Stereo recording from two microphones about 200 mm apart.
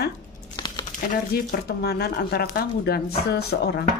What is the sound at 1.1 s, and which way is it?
A woman's voice, 50° left (ahead or behind).